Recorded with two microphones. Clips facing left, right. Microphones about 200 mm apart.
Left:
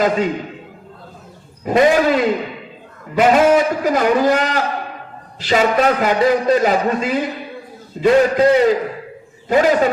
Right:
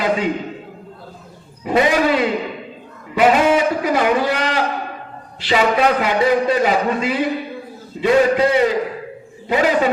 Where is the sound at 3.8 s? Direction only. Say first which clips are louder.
Left 2 dB; 45° left (ahead or behind).